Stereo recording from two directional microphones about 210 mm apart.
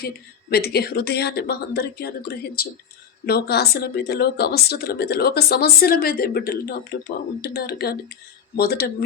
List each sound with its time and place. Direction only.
0.5 s speech: 50° left (ahead or behind)